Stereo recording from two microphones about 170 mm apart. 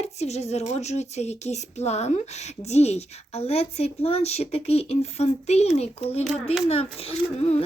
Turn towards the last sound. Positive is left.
turn(degrees=40)  # may be behind; listen again after turning